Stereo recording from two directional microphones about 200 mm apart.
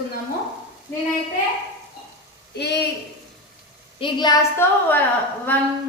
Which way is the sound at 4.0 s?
20° left (ahead or behind).